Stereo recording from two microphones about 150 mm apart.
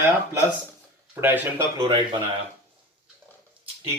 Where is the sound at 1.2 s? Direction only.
15° right (ahead or behind).